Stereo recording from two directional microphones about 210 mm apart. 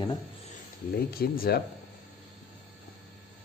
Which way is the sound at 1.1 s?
45° left (ahead or behind).